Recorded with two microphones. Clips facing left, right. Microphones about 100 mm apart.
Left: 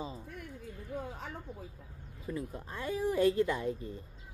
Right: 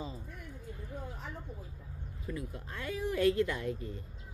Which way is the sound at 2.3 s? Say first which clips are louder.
Left 3 dB; 25° left (ahead or behind).